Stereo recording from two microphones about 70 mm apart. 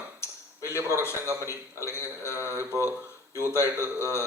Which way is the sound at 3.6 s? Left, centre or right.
Left.